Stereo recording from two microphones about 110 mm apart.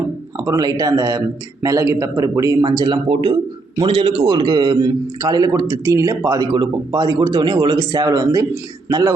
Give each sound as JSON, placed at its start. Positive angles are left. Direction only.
{"t": 0.3, "sound": "a man's voice", "side_deg": -35}
{"t": 2.6, "sound": "a man's voice", "side_deg": -45}